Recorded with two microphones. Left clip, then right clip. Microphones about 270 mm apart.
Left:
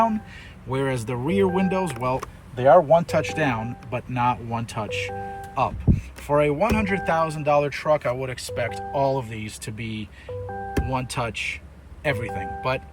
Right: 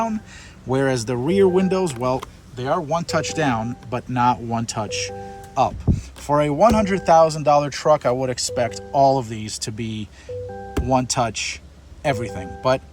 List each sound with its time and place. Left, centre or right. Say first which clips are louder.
0.7 s speech: right 5 dB; centre
2.6 s speech: left 7 dB; centre
5.9 s speech: even; left
6.2 s speech: right 4 dB; centre
11.1 s speech: right 5 dB; centre